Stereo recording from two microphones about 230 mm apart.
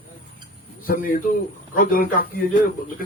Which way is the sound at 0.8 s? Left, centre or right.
Left.